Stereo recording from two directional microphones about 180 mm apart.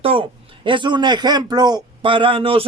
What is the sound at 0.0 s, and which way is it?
A man's voice, 30° right (ahead or behind).